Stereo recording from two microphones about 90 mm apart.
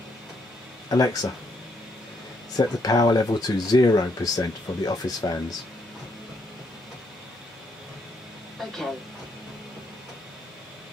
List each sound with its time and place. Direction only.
0.8 s speech: 40° left (ahead or behind)
2.5 s speech: 45° left (ahead or behind)